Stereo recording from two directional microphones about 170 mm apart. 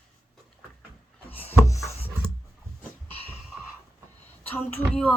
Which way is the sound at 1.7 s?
20° left (ahead or behind).